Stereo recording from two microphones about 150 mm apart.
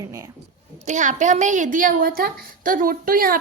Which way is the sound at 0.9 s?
55° right (ahead or behind).